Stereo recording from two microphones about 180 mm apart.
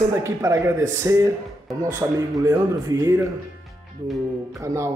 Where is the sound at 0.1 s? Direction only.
15° right (ahead or behind).